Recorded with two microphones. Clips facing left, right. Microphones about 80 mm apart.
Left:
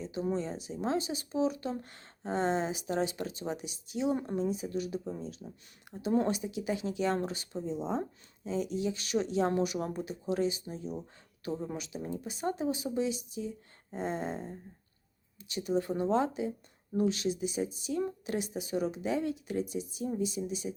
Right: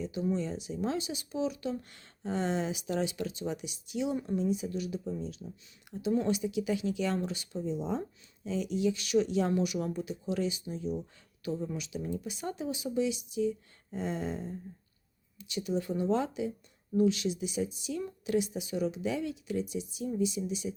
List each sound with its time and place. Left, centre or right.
0.0 s speech: left